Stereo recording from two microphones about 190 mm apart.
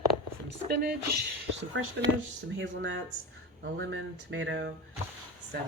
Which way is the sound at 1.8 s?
90° right.